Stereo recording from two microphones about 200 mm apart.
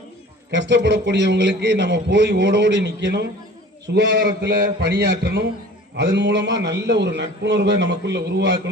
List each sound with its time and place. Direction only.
0.5 s a man's voice: 65° right (ahead or behind)